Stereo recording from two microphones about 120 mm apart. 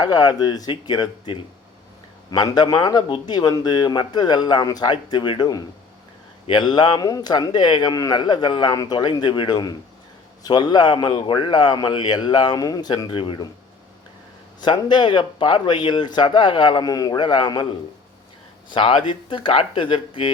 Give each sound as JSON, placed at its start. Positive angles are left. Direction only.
{"t": 0.0, "sound": "speech", "side_deg": 35}
{"t": 14.6, "sound": "speech", "side_deg": 40}